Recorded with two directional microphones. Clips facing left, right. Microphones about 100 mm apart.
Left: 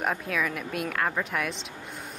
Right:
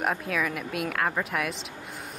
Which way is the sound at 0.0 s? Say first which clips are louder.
Right 1 dB; centre (ahead or behind).